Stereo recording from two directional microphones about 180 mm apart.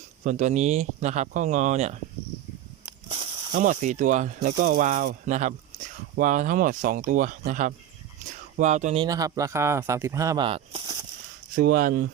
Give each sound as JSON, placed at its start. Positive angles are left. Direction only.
{"t": 0.3, "sound": "speech", "side_deg": -40}
{"t": 3.5, "sound": "speech", "side_deg": -45}
{"t": 8.2, "sound": "a sound", "side_deg": -40}
{"t": 9.0, "sound": "speech", "side_deg": -20}
{"t": 10.4, "sound": "a sound", "side_deg": -30}
{"t": 11.5, "sound": "speech", "side_deg": -50}